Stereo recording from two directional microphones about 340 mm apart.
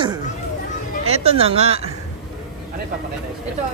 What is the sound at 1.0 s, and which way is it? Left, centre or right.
Speech, centre.